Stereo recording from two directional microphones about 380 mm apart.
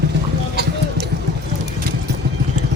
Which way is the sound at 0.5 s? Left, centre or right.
Right.